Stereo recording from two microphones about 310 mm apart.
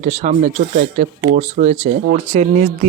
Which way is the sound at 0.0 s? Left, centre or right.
Right.